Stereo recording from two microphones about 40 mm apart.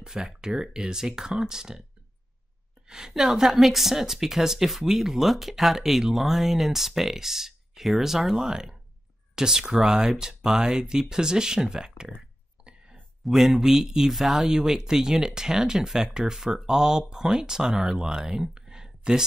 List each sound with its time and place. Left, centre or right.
0.0 s speech: centre
2.9 s speech: centre
13.2 s speech: centre